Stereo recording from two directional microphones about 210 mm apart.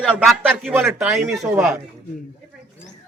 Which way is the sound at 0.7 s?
10° right (ahead or behind).